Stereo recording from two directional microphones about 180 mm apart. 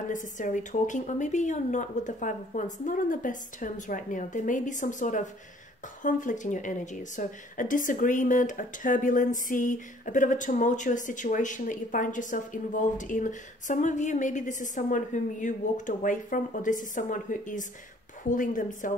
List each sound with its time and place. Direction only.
0.1 s a woman's voice: 45° left (ahead or behind)